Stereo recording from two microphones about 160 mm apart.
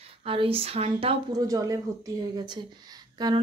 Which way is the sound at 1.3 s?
25° right (ahead or behind).